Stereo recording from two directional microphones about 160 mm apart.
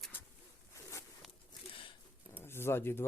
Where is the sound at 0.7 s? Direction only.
15° left (ahead or behind).